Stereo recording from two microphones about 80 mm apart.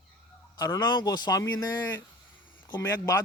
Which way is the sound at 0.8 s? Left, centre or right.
Left.